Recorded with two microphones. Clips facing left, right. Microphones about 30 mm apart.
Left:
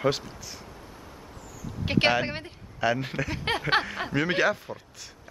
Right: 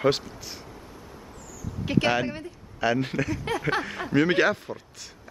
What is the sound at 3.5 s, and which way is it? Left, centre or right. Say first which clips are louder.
Speech: left 5 dB; left.